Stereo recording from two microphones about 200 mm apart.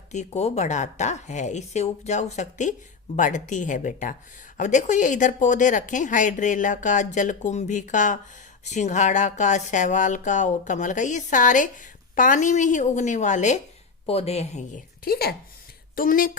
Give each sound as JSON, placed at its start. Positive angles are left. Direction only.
{"t": 0.1, "sound": "a woman's voice", "side_deg": 35}
{"t": 15.0, "sound": "speech", "side_deg": 50}